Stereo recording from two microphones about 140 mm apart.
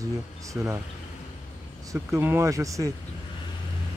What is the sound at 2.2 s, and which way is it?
Speech, 15° right (ahead or behind).